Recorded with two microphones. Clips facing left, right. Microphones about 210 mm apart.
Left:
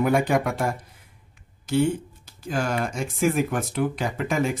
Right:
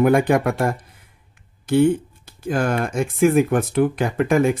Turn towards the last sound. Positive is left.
turn(degrees=-55)  # may be behind; listen again after turning